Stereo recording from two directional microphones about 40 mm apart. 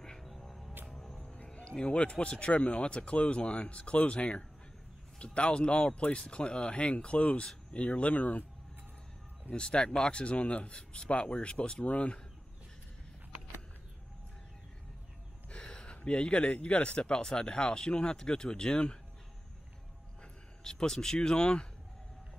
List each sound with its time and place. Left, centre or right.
0.5 s music: centre
1.3 s a sound: left
2.0 s speech: left
9.5 s speech: left
10.3 s speech: left
15.6 s a sound: left
16.1 s speech: left
20.6 s speech: centre